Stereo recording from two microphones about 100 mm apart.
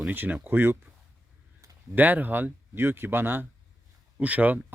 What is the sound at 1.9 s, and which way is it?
Speech, 15° right (ahead or behind).